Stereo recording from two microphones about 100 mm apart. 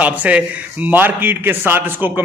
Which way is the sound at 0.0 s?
15° right (ahead or behind).